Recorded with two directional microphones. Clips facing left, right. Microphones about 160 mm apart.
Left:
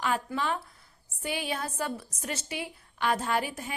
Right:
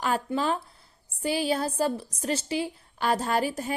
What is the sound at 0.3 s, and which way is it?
A woman's voice, 35° right (ahead or behind).